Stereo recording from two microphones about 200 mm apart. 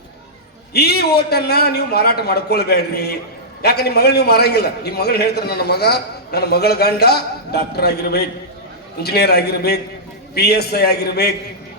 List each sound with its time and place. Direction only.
0.7 s a man's voice: 55° left (ahead or behind)